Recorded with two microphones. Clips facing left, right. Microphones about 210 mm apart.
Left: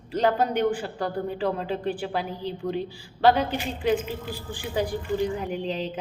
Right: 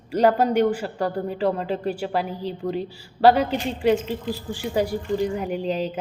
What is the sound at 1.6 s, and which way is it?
Speech, 40° right (ahead or behind).